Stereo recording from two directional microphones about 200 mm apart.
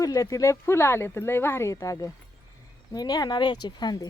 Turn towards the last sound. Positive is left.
turn(degrees=20)  # may be behind; listen again after turning